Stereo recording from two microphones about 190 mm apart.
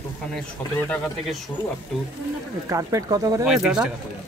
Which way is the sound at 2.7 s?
20° right (ahead or behind).